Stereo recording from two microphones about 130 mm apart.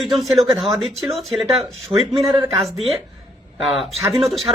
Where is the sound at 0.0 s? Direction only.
Centre (ahead or behind).